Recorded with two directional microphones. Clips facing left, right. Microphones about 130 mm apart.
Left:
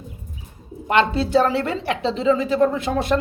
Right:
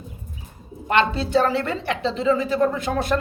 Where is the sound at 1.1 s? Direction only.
30° left (ahead or behind).